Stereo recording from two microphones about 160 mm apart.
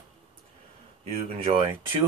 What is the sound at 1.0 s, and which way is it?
Speech, 40° right (ahead or behind).